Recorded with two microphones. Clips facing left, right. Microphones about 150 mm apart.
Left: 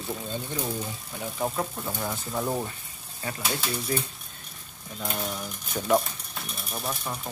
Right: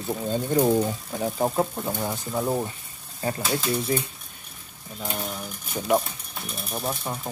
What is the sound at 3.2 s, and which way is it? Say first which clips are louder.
Speech: right 5 dB; 30° right (ahead or behind).